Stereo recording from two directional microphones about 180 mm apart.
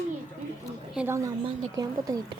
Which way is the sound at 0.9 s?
10° right (ahead or behind).